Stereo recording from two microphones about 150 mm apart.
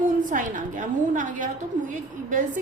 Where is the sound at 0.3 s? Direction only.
60° right (ahead or behind).